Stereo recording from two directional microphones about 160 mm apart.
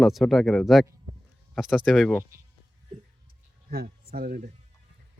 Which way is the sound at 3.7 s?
70° right (ahead or behind).